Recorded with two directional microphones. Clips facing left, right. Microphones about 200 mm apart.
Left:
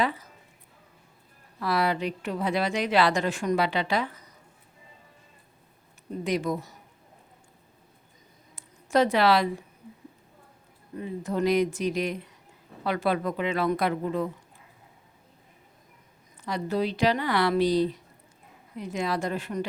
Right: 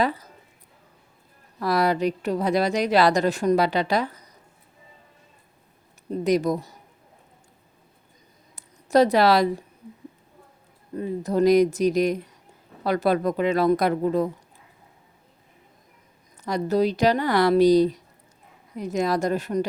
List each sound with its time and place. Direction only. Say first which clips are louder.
0.0 s speech: right 4 dB; 40° right (ahead or behind)
1.5 s a woman's voice: right 4 dB; 40° right (ahead or behind)
6.1 s a woman's voice: right 6 dB; 40° right (ahead or behind)
8.5 s a sound: right 5 dB; 40° right (ahead or behind)
10.9 s a woman's voice: right 6 dB; 40° right (ahead or behind)
16.4 s a woman's voice: right 6 dB; 40° right (ahead or behind)